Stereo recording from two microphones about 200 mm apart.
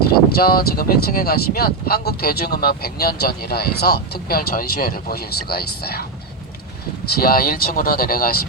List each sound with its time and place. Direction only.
0.1 s speech: 50° left (ahead or behind)
7.2 s speech: 45° left (ahead or behind)